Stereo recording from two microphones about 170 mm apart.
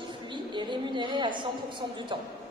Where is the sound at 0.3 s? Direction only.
25° right (ahead or behind).